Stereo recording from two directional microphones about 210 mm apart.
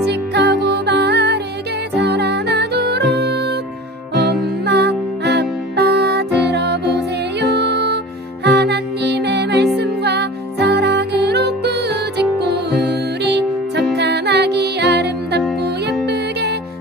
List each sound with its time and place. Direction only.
0.0 s music: 50° right (ahead or behind)